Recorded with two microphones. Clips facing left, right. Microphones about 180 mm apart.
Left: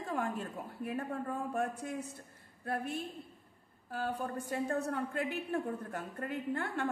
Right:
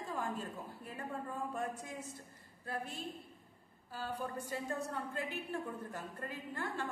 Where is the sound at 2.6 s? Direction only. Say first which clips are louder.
Left 5 dB; 60° left (ahead or behind).